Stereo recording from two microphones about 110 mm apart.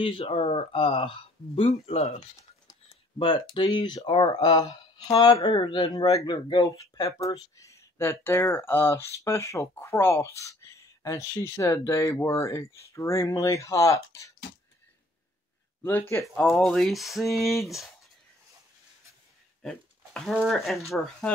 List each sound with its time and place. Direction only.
0.0 s speech: 60° left (ahead or behind)
3.2 s speech: 45° left (ahead or behind); by 14.3 s 30° left (ahead or behind)
15.8 s speech: 20° left (ahead or behind)
16.3 s speech: 5° left (ahead or behind)
19.6 s speech: 5° left (ahead or behind)